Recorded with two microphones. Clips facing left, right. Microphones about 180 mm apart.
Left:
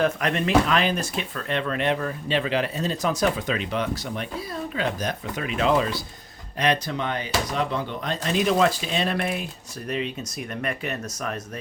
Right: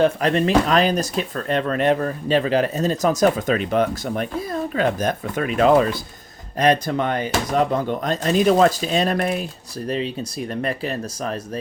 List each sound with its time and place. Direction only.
0.0 s speech: 35° right (ahead or behind)